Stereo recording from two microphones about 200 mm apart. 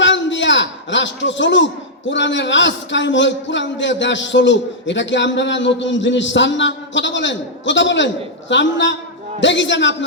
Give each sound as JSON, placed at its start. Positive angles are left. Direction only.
{"t": 0.0, "sound": "a man's voice", "side_deg": 65}